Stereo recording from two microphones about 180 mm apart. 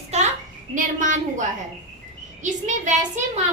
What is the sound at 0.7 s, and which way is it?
Speech, 45° right (ahead or behind).